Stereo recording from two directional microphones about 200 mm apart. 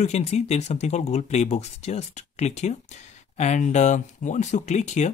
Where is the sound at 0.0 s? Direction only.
35° left (ahead or behind).